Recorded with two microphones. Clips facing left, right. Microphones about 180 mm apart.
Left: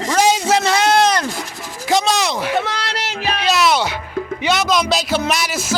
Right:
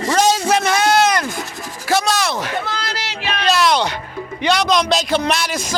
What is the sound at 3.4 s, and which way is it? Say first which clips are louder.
Music: right 1 dB; 5° left (ahead or behind).